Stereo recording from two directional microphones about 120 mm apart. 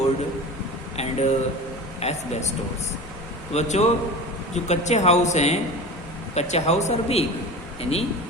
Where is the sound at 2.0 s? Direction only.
65° left (ahead or behind).